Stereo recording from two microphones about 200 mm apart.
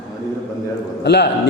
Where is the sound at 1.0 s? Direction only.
55° left (ahead or behind).